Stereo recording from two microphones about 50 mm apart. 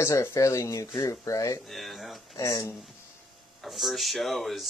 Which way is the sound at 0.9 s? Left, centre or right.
Left.